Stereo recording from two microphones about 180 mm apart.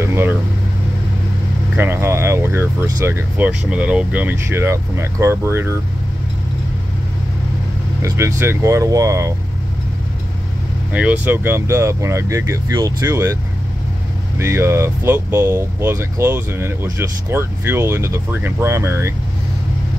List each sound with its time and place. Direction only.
0.0 s vehicle: 15° right (ahead or behind)
1.8 s speech: 15° right (ahead or behind)
8.0 s speech: 15° right (ahead or behind)
10.9 s speech: 5° right (ahead or behind)
14.4 s speech: 15° right (ahead or behind)